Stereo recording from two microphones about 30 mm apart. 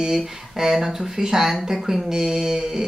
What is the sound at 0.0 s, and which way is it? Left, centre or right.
Speech, centre.